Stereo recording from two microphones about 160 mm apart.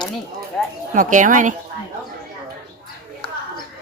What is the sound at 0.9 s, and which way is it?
Speech, 55° right (ahead or behind).